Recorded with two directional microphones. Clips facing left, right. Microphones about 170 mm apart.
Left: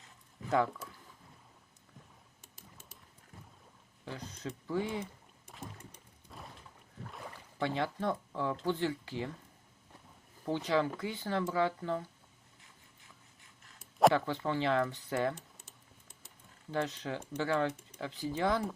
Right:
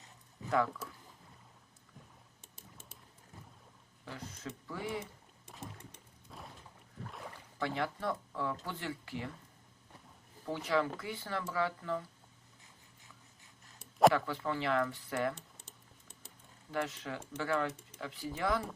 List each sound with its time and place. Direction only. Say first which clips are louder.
4.0 s speech: left 3 dB; 25° left (ahead or behind)
6.3 s a sound: even; centre (ahead or behind)
7.6 s speech: left 2 dB; 25° left (ahead or behind)
10.4 s speech: left 2 dB; 20° left (ahead or behind)
14.4 s speech: left 2 dB; 25° left (ahead or behind)
15.4 s typing: even; centre (ahead or behind)
16.7 s speech: left 2 dB; 25° left (ahead or behind)